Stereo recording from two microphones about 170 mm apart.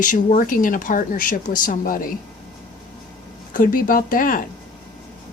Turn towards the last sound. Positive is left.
turn(degrees=55)  # may be behind; listen again after turning